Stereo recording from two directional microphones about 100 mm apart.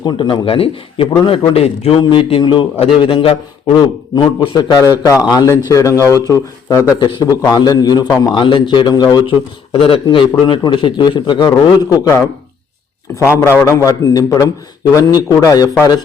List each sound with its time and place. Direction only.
0.0 s a man's voice: 50° left (ahead or behind); by 1.0 s 65° left (ahead or behind)
1.3 s a man's voice: 85° left
2.0 s a man's voice: 65° left (ahead or behind)
2.4 s a man's voice: 55° left (ahead or behind)
3.7 s a man's voice: 45° left (ahead or behind)
7.0 s a man's voice: 45° left (ahead or behind)
8.4 s a man's voice: 55° left (ahead or behind)
8.9 s a man's voice: 45° left (ahead or behind)
9.7 s a man's voice: 70° left (ahead or behind); by 11.4 s 50° left (ahead or behind)
11.4 s a man's voice: 35° left (ahead or behind)
13.7 s a man's voice: 35° left (ahead or behind)